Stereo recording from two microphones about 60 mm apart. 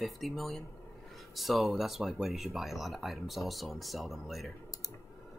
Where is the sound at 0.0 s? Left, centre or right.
Centre.